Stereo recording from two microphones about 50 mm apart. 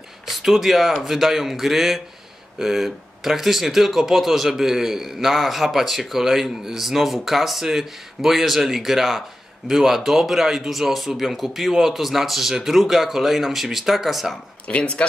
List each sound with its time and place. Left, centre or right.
0.3 s speech: centre
14.7 s speech: left